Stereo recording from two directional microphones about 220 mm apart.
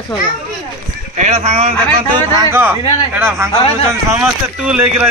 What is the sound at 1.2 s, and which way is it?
Speech, 30° right (ahead or behind).